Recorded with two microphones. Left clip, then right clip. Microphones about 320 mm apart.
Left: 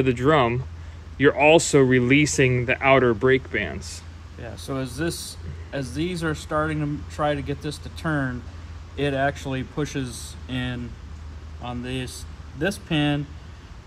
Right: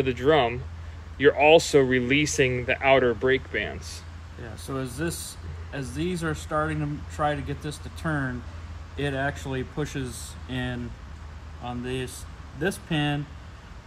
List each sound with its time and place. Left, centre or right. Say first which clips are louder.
0.0 s speech: left 2 dB; centre